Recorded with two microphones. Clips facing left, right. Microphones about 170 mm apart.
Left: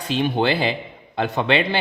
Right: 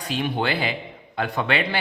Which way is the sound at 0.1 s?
25° left (ahead or behind).